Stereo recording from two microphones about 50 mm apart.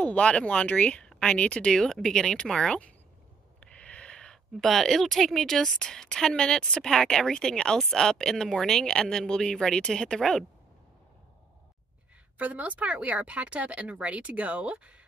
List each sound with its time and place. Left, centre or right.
0.0 s speech: left
1.8 s a woman's voice: centre
3.6 s a sound: left
4.6 s a woman's voice: centre
12.4 s speech: right